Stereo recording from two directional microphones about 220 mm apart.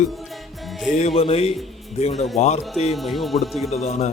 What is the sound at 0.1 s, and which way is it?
Music, centre (ahead or behind).